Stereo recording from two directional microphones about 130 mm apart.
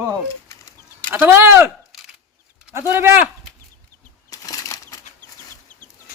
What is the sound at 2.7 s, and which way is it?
Speech, 20° right (ahead or behind).